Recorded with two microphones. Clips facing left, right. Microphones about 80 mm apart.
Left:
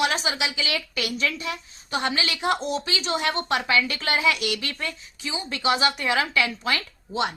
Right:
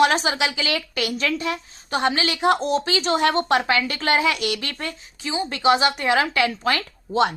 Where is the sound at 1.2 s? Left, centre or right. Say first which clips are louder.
Right 4 dB; right.